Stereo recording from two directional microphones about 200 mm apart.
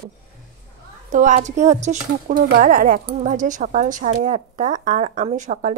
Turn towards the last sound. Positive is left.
turn(degrees=-35)  # may be behind; listen again after turning